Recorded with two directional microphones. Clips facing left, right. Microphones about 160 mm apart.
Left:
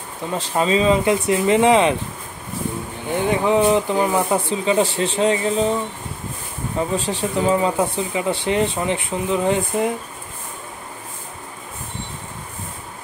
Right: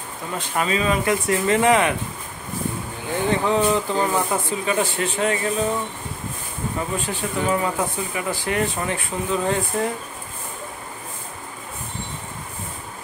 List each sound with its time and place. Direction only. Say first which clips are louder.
0.3 s speech: left 5 dB; 25° left (ahead or behind)
3.1 s speech: left 3 dB; 15° left (ahead or behind)
4.5 s speech: left 4 dB; 25° left (ahead or behind)
7.1 s speech: left 3 dB; 30° left (ahead or behind)